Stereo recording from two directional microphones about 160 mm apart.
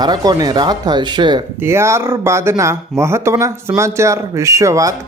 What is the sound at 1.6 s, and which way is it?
Speech, 15° right (ahead or behind).